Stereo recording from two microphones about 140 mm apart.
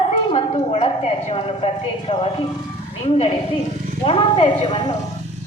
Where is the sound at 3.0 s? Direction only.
45° left (ahead or behind).